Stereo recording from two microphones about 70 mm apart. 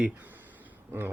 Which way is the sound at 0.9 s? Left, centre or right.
Right.